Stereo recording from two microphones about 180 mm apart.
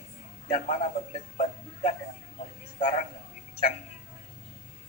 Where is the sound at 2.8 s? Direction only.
40° left (ahead or behind).